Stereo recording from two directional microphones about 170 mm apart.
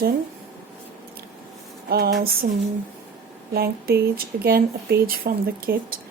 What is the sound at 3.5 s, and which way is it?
Speech, 65° right (ahead or behind).